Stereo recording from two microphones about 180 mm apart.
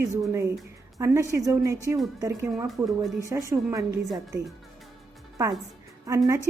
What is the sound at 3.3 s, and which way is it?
Speech, 15° right (ahead or behind).